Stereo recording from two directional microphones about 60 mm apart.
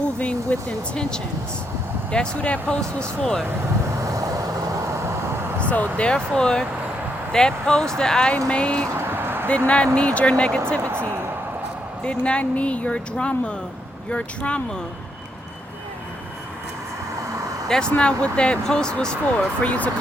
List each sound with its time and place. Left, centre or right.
0.0 s speech: left
4.0 s vehicle: right
4.9 s vehicle: right
5.5 s speech: left
9.0 s music: right
9.6 s speech: centre
10.8 s speech: right
12.0 s speech: centre
17.7 s speech: centre
19.6 s speech: left